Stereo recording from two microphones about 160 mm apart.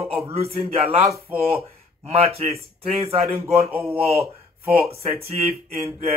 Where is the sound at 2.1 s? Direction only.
40° right (ahead or behind).